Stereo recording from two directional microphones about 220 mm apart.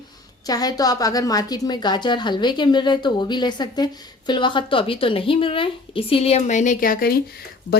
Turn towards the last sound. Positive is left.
turn(degrees=45)  # may be behind; listen again after turning